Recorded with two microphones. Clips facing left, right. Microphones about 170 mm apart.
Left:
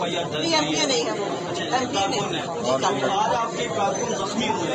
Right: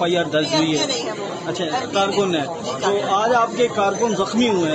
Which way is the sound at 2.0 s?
90° right.